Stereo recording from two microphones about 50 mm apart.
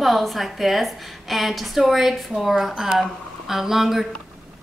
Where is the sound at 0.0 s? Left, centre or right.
Centre.